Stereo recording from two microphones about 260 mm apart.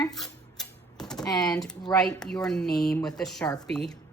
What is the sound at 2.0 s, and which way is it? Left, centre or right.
Speech, centre.